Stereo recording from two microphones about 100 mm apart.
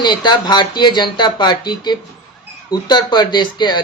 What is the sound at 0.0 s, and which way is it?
Speech, 45° left (ahead or behind).